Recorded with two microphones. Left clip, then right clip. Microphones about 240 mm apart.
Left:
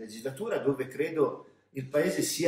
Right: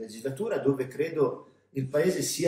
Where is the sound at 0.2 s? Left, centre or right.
Centre.